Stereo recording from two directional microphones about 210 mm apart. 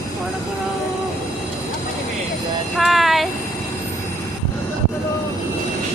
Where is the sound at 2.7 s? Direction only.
Centre (ahead or behind).